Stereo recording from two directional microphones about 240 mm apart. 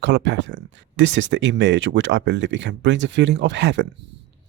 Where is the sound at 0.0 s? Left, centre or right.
Right.